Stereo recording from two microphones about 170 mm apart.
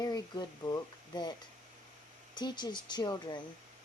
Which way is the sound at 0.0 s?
25° left (ahead or behind).